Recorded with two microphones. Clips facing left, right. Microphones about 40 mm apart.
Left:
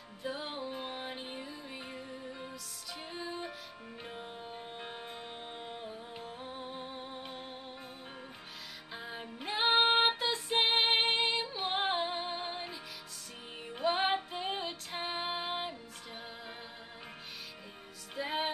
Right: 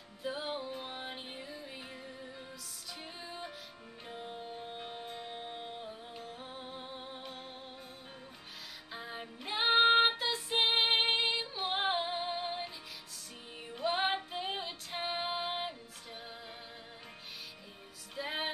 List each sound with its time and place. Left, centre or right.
0.2 s music: centre
3.0 s music: centre
8.9 s music: centre
13.8 s music: centre
18.1 s music: centre